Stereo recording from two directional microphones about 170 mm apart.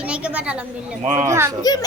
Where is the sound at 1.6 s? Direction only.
20° left (ahead or behind).